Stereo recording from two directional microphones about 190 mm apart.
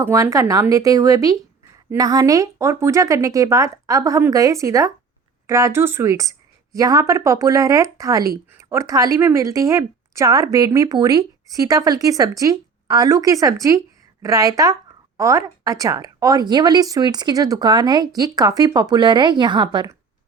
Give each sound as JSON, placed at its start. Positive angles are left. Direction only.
{"t": 0.0, "sound": "a woman's voice", "side_deg": -15}